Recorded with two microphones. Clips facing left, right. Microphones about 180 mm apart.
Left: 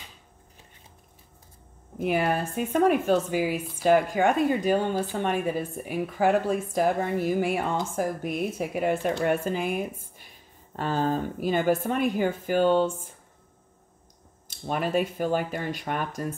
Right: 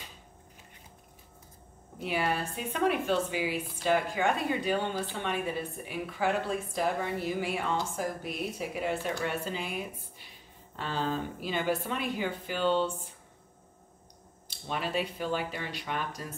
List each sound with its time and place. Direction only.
2.0 s speech: 50° left (ahead or behind)
14.5 s speech: 50° left (ahead or behind)